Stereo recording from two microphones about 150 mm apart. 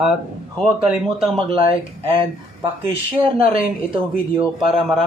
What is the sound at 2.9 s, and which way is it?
Speech, 40° right (ahead or behind).